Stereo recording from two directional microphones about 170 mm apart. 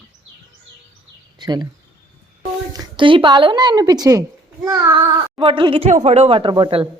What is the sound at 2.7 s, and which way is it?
A woman's voice, 30° right (ahead or behind).